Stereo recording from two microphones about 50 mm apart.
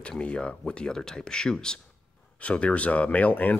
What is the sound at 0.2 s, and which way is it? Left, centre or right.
Speech, left.